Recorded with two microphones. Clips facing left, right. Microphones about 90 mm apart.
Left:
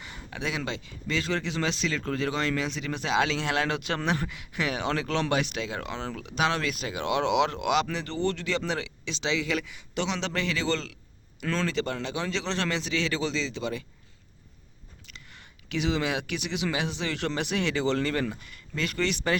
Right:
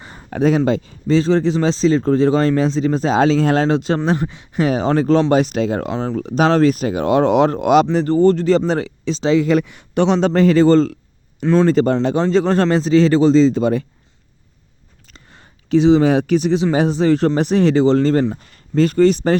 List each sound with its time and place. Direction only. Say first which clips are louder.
0.0 s speech: right 17 dB; 40° right (ahead or behind)
15.0 s a sound: right 4 dB; 35° right (ahead or behind)
16.7 s speech: right 16 dB; 40° right (ahead or behind)